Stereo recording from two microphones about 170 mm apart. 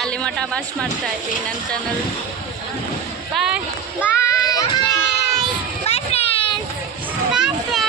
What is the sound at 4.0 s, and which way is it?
Child singing, 15° left (ahead or behind).